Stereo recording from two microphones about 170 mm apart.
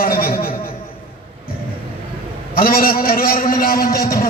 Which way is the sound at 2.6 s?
60° left (ahead or behind).